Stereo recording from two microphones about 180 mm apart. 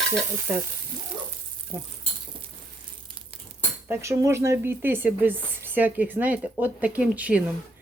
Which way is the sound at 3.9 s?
15° right (ahead or behind).